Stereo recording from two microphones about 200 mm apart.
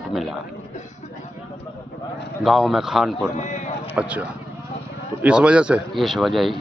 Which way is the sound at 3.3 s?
35° left (ahead or behind).